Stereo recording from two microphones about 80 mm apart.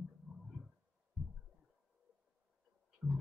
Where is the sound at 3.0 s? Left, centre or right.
Centre.